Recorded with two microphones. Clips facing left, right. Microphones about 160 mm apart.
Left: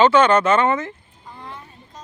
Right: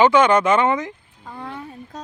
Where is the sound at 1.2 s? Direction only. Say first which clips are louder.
Right 6 dB; 65° right (ahead or behind).